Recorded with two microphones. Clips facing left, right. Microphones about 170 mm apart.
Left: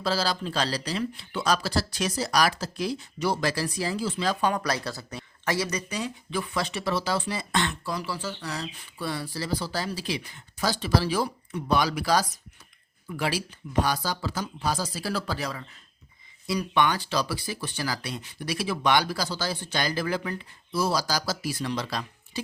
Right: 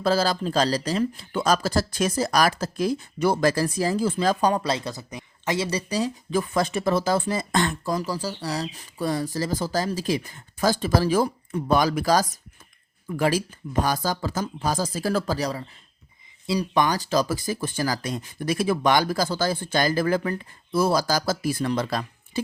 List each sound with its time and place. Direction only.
0.0 s speech: 50° right (ahead or behind)
4.6 s speech: 20° right (ahead or behind); by 22.4 s 50° right (ahead or behind)